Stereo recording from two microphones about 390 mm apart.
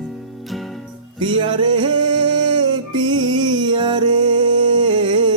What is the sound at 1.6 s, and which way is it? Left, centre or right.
Music, centre.